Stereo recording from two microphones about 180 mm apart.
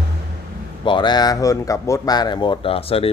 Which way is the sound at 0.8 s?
25° left (ahead or behind).